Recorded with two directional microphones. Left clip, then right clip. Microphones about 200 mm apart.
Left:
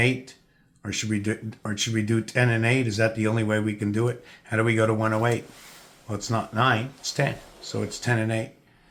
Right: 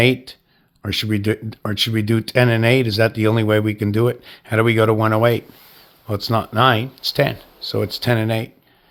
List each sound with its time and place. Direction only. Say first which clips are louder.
0.0 s speech: right 8 dB; 45° right (ahead or behind)